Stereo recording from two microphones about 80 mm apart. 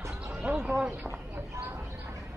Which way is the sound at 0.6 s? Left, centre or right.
Centre.